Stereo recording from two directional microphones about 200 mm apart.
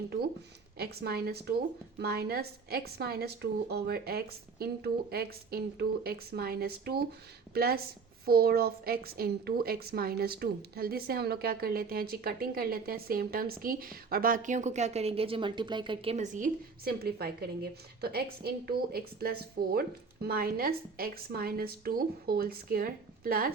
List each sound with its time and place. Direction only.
0.8 s a woman's voice: 50° right (ahead or behind)